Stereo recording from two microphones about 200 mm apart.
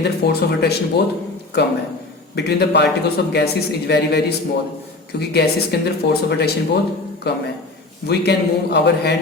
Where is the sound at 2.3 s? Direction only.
55° left (ahead or behind).